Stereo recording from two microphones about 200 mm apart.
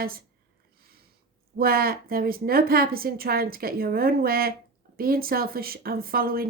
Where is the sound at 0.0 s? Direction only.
45° right (ahead or behind).